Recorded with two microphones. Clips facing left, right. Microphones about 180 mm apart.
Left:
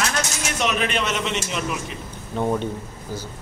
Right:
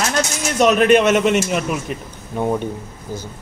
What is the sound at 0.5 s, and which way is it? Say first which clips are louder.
A man's voice: right 11 dB; 45° right (ahead or behind).